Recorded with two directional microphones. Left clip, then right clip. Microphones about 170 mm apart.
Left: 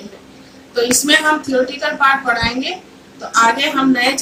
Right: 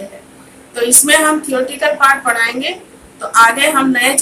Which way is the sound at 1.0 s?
10° right (ahead or behind).